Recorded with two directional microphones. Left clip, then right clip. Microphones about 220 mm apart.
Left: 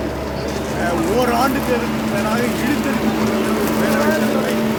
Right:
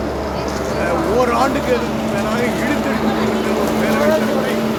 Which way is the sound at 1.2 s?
5° left (ahead or behind).